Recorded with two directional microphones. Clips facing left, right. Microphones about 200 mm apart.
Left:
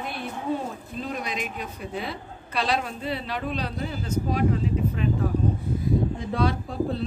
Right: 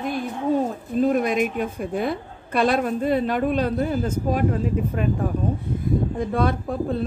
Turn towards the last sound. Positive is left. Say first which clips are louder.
# right 3 dB
turn(degrees=-55)  # may be behind; listen again after turning